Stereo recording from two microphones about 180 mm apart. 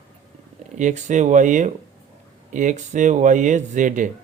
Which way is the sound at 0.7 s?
40° right (ahead or behind).